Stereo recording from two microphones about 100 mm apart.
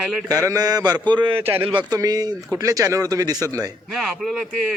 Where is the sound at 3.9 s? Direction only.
Centre (ahead or behind).